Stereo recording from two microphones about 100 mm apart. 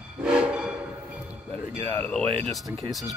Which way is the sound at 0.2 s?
10° right (ahead or behind).